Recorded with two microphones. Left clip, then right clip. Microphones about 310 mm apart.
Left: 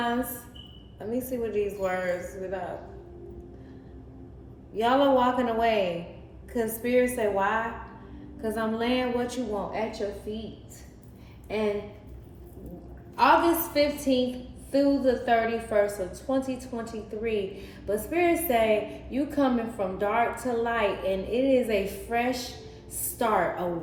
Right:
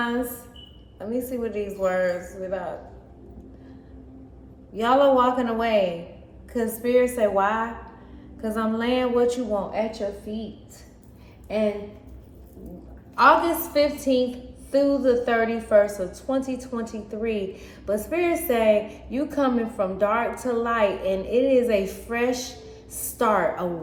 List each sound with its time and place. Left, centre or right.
0.9 s a woman's voice: centre
4.7 s a woman's voice: centre
13.1 s a woman's voice: centre